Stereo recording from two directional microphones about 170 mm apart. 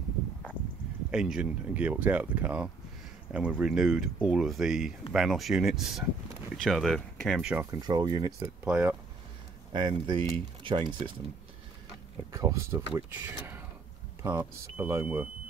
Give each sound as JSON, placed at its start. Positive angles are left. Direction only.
{"t": 1.1, "sound": "speech", "side_deg": -5}
{"t": 7.7, "sound": "speech", "side_deg": -25}
{"t": 8.3, "sound": "speech", "side_deg": -5}
{"t": 9.7, "sound": "speech", "side_deg": -30}
{"t": 12.3, "sound": "speech", "side_deg": -20}